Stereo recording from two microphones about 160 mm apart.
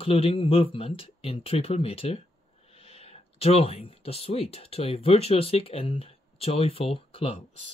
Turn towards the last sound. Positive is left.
turn(degrees=35)  # may be behind; listen again after turning